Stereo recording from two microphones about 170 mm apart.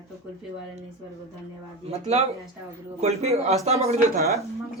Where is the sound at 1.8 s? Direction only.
40° right (ahead or behind).